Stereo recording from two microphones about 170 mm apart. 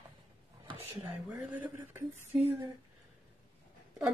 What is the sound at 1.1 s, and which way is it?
Speech, 10° right (ahead or behind).